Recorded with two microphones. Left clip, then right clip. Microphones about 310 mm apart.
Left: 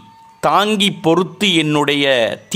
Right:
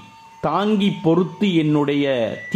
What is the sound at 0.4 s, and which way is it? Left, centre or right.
Speech, left.